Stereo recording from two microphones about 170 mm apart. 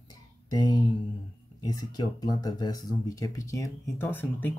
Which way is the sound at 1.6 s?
25° left (ahead or behind).